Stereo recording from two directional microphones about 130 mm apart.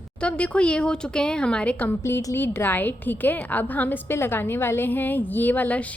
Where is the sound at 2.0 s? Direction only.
20° left (ahead or behind).